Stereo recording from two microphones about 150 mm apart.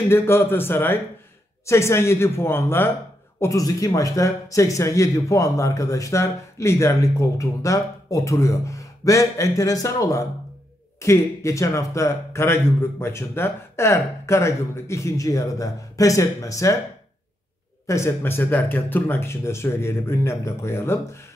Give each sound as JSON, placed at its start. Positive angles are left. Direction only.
{"t": 0.1, "sound": "a man's voice", "side_deg": 15}
{"t": 17.8, "sound": "speech", "side_deg": 20}